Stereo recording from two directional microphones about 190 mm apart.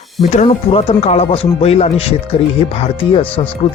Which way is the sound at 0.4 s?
30° left (ahead or behind).